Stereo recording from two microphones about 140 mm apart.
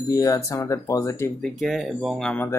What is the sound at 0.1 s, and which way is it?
Speech, 25° left (ahead or behind).